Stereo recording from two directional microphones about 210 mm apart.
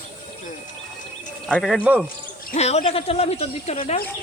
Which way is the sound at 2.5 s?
30° left (ahead or behind).